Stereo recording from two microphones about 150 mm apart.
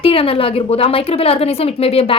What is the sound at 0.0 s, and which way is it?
Speech, 40° left (ahead or behind).